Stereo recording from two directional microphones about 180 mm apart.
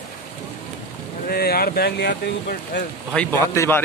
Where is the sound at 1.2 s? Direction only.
60° left (ahead or behind).